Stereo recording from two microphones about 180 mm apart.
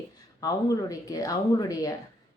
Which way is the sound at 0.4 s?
20° left (ahead or behind).